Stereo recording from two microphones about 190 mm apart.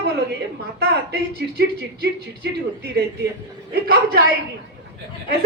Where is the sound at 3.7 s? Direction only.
55° right (ahead or behind).